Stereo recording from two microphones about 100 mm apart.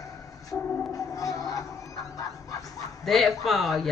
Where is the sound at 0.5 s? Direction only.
15° left (ahead or behind).